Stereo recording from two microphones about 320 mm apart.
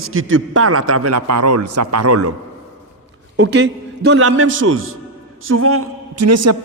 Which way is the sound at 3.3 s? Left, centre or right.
Right.